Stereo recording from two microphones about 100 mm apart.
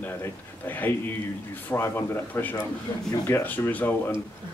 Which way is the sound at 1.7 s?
25° left (ahead or behind).